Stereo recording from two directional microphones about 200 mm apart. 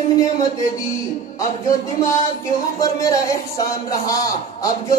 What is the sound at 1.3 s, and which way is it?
A man's voice, 15° left (ahead or behind).